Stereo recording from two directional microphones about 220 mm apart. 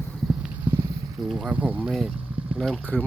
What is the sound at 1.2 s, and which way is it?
Speech, centre (ahead or behind).